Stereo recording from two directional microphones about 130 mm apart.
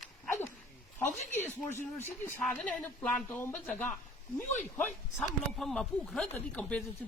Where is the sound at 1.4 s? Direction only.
20° left (ahead or behind).